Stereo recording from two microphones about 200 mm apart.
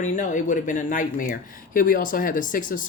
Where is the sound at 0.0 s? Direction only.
40° left (ahead or behind).